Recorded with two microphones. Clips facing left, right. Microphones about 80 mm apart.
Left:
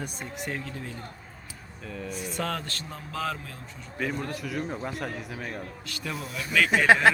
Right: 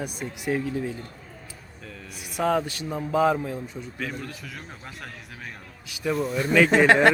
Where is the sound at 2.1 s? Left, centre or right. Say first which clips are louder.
Right 8 dB; centre.